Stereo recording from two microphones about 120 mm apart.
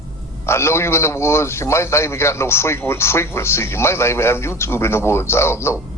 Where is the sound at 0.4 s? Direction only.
20° left (ahead or behind).